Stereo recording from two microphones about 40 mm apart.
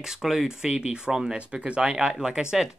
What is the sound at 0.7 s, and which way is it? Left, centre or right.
Speech, right.